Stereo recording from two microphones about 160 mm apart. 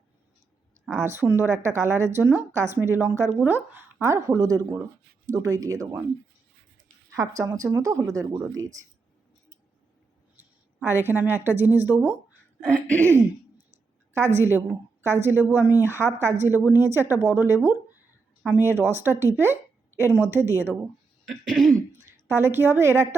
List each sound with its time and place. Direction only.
0.9 s a woman's voice: 15° right (ahead or behind)
7.2 s speech: 20° right (ahead or behind)
10.8 s a woman's voice: 15° right (ahead or behind)
14.1 s a woman's voice: 15° right (ahead or behind)
21.2 s throat clearing: centre (ahead or behind)
22.3 s a woman's voice: 15° right (ahead or behind)